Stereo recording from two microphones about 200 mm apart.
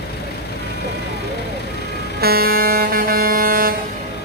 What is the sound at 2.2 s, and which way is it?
Vehicle, 50° right (ahead or behind).